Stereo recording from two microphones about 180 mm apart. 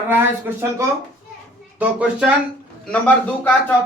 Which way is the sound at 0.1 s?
10° right (ahead or behind).